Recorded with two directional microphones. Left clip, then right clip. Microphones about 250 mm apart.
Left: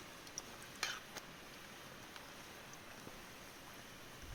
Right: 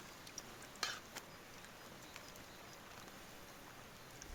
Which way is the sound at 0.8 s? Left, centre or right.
Centre.